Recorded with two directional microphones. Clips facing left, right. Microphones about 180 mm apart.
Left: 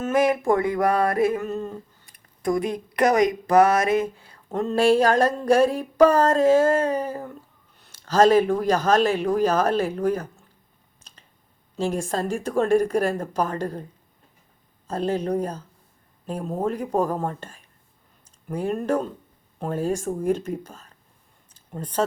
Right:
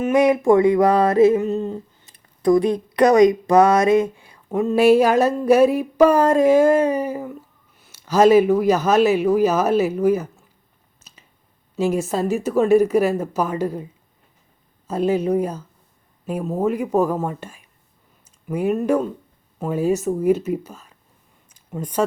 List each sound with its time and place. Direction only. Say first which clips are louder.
0.0 s a sound: right 5 dB; 20° right (ahead or behind)
7.8 s speech: right 2 dB; 10° right (ahead or behind)
11.0 s finger snapping: right 2 dB; 5° right (ahead or behind)
11.8 s speech: right 5 dB; 5° right (ahead or behind)
14.8 s speech: right 5 dB; 10° right (ahead or behind)
21.5 s a sound: right 3 dB; 10° right (ahead or behind)